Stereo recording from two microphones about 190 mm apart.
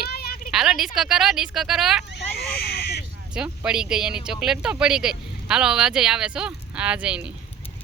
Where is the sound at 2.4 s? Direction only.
60° left (ahead or behind).